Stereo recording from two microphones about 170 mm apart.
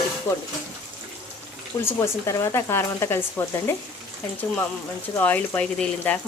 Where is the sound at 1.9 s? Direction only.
20° left (ahead or behind).